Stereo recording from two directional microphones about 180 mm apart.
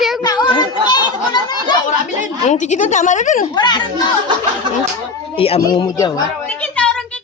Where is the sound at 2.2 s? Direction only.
40° left (ahead or behind).